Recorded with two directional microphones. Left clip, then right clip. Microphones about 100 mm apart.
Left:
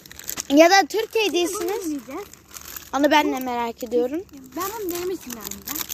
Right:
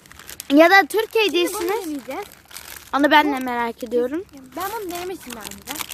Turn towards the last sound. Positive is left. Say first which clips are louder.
# right 2 dB
turn(degrees=15)  # may be behind; listen again after turning